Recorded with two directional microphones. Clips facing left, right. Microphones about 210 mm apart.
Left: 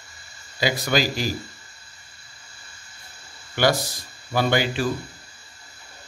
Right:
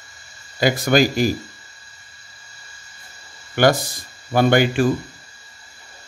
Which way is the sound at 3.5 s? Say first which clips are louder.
Right 5 dB; 50° right (ahead or behind).